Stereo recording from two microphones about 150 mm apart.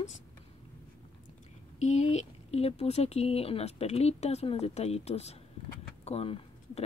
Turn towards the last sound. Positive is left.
turn(degrees=40)  # may be behind; listen again after turning